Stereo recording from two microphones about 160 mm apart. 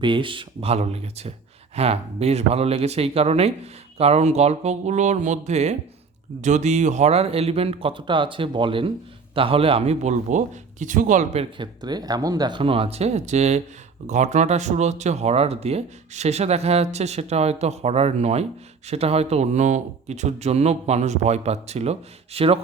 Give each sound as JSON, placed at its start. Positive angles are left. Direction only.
{"t": 0.0, "sound": "speech", "side_deg": -30}
{"t": 11.5, "sound": "speech", "side_deg": -25}